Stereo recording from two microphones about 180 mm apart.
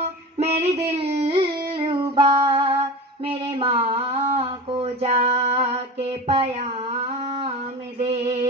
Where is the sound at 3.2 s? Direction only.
30° right (ahead or behind).